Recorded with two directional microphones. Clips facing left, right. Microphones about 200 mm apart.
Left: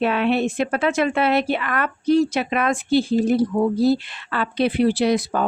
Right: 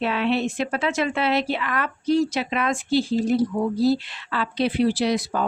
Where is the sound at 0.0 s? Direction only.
55° left (ahead or behind).